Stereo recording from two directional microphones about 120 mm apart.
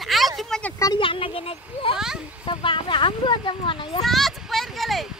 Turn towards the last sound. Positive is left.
turn(degrees=0)  # may be behind; listen again after turning